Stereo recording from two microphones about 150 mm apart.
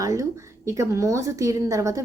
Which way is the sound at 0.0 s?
20° right (ahead or behind).